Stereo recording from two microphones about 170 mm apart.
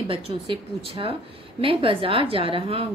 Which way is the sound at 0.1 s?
35° right (ahead or behind).